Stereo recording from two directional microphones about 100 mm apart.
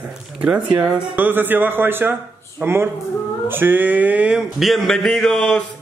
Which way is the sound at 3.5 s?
20° right (ahead or behind).